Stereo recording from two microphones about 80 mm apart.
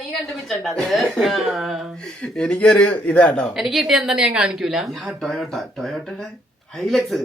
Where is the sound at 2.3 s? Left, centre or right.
Centre.